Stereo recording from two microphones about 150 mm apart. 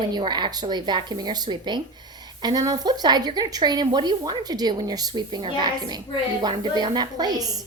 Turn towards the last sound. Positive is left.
turn(degrees=-25)  # may be behind; listen again after turning